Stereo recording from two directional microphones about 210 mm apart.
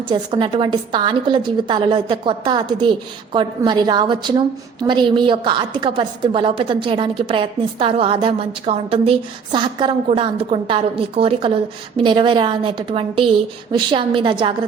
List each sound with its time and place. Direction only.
0.1 s a woman's voice: 25° right (ahead or behind)